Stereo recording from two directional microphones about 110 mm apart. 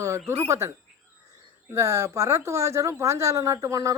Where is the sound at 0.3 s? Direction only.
25° right (ahead or behind).